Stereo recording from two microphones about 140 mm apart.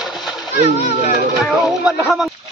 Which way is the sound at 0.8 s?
50° left (ahead or behind).